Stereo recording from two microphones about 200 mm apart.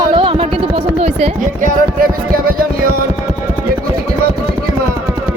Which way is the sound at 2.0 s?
45° right (ahead or behind).